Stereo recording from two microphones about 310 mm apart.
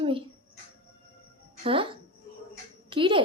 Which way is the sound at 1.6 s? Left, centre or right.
Centre.